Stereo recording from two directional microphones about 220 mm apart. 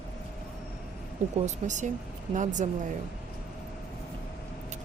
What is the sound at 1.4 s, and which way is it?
Speech, 35° right (ahead or behind).